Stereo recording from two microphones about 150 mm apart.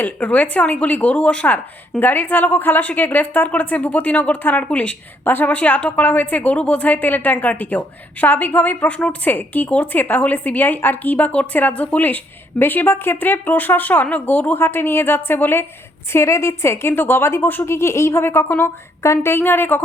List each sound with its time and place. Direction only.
0.0 s speech: 10° left (ahead or behind)